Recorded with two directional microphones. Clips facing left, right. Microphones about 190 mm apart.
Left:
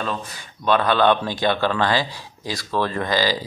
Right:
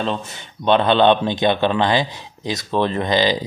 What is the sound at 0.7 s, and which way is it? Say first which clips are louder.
Speech: right 3 dB; 25° right (ahead or behind).